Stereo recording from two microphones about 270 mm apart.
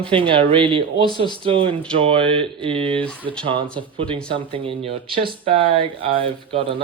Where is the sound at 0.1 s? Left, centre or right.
Centre.